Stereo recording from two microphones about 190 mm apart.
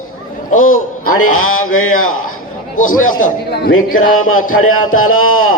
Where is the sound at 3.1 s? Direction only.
45° left (ahead or behind).